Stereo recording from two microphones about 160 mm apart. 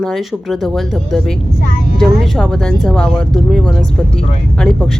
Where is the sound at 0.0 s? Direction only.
Centre (ahead or behind).